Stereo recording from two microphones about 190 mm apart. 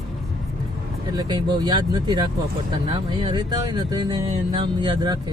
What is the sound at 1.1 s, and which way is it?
Speech, 20° right (ahead or behind).